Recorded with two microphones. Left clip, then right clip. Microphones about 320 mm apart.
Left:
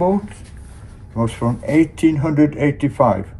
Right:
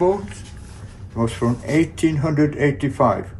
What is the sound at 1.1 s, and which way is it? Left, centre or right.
Speech, left.